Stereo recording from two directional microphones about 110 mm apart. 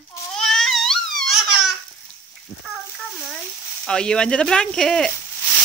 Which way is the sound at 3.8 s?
10° left (ahead or behind).